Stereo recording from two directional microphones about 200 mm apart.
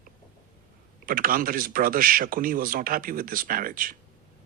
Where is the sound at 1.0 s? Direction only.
45° right (ahead or behind).